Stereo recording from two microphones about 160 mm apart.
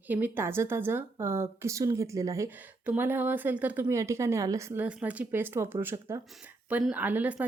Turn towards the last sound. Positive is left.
turn(degrees=-10)  # may be behind; listen again after turning